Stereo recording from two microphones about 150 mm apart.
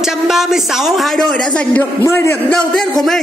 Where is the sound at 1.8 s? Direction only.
15° left (ahead or behind).